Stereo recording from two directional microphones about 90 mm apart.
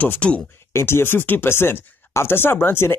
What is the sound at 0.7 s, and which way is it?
Speech, 25° left (ahead or behind).